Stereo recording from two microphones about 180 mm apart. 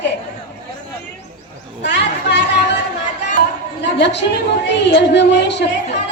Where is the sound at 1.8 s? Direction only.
70° left (ahead or behind).